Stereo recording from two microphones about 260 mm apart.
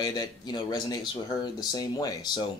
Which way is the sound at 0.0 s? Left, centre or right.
Centre.